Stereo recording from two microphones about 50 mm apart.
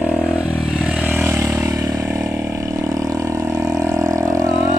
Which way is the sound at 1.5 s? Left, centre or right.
Right.